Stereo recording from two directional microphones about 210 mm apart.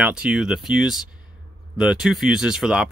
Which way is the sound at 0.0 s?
5° right (ahead or behind).